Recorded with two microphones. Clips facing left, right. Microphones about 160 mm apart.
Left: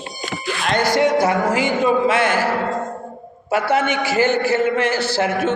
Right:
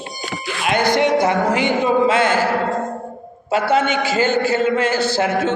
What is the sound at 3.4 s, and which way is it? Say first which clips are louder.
A man's voice: right 1 dB; 25° right (ahead or behind).